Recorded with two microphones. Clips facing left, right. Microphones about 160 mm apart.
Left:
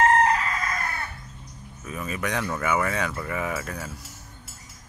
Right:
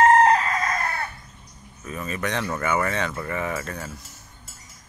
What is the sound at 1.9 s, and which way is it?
Speech, 5° left (ahead or behind).